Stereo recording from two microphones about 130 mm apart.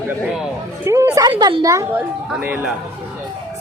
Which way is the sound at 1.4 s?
35° right (ahead or behind).